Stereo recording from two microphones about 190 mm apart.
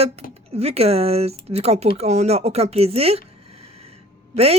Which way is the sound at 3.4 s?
35° right (ahead or behind).